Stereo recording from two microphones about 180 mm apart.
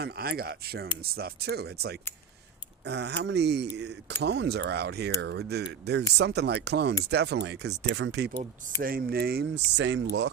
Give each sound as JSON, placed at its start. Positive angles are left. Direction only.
{"t": 0.0, "sound": "speech", "side_deg": -60}
{"t": 8.8, "sound": "speech", "side_deg": -55}
{"t": 9.7, "sound": "speech", "side_deg": -80}